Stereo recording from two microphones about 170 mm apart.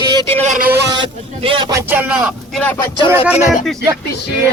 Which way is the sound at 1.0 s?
30° right (ahead or behind).